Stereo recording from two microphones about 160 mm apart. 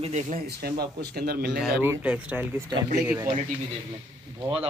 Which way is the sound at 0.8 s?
75° right (ahead or behind).